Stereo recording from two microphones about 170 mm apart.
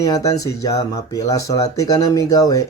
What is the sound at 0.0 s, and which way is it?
Speech, 20° left (ahead or behind).